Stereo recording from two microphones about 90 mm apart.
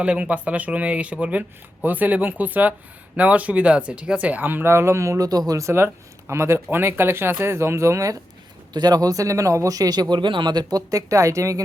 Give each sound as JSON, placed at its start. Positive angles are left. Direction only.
{"t": 0.0, "sound": "speech", "side_deg": -15}
{"t": 8.7, "sound": "a man's voice", "side_deg": -50}